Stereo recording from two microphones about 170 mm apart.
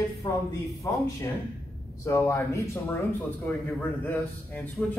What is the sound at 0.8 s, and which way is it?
Speech, 20° left (ahead or behind).